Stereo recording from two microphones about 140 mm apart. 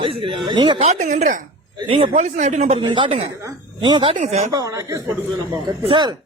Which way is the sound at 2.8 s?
35° right (ahead or behind).